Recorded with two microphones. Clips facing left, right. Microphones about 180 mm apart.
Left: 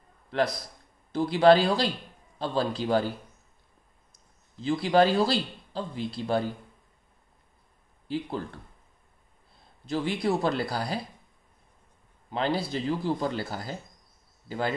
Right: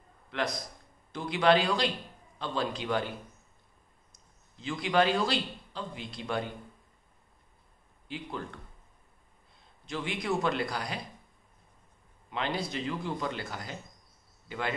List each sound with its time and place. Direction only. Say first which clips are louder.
0.3 s a man's voice: left 6 dB; 35° left (ahead or behind)
4.6 s a man's voice: left 5 dB; 35° left (ahead or behind)
8.1 s a man's voice: left 7 dB; 35° left (ahead or behind)
9.8 s a man's voice: left 5 dB; 35° left (ahead or behind)
12.3 s a man's voice: left 5 dB; 35° left (ahead or behind)